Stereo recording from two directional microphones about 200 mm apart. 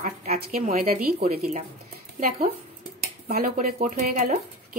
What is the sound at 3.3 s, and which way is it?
Speech, 45° right (ahead or behind).